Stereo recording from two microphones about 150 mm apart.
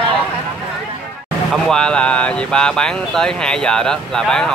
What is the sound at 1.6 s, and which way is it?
Speech, 5° left (ahead or behind).